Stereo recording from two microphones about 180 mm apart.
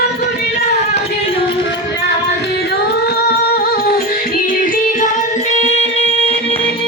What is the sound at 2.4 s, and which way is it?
Music, 65° left (ahead or behind).